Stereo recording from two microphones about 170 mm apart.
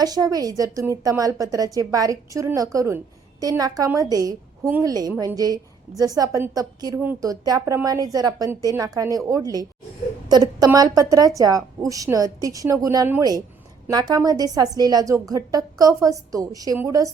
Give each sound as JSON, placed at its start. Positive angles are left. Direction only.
{"t": 0.0, "sound": "a woman's voice", "side_deg": -20}